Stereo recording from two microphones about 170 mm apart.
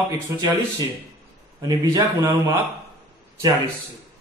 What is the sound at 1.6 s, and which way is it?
A man's voice, 20° right (ahead or behind).